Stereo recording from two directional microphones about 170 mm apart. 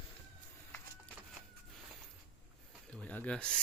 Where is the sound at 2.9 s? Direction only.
10° left (ahead or behind).